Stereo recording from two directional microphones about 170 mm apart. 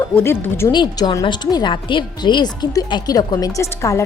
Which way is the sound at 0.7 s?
25° left (ahead or behind).